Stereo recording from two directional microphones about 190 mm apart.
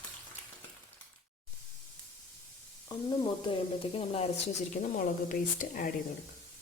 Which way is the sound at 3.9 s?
30° left (ahead or behind).